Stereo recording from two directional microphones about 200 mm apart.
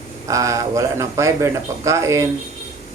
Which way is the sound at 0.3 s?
15° right (ahead or behind).